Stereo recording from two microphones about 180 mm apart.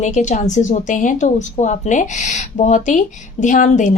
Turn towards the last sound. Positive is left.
turn(degrees=45)  # may be behind; listen again after turning